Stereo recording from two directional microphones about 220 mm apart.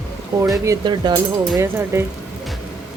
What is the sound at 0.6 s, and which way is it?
Speech, 15° right (ahead or behind).